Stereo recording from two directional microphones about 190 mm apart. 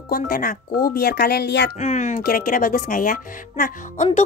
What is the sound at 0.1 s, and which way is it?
Speech, 50° left (ahead or behind).